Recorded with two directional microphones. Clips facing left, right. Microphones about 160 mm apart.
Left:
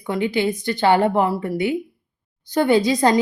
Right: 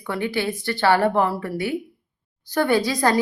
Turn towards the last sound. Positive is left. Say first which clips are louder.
# left 3 dB
turn(degrees=20)  # may be behind; listen again after turning